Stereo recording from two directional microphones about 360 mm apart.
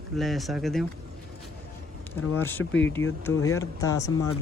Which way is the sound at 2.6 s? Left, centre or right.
Left.